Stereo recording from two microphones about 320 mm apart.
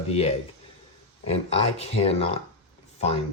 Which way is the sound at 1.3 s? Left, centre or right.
Centre.